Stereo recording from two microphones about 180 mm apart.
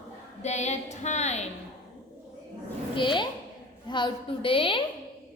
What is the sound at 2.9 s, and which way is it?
A woman's voice, 25° left (ahead or behind).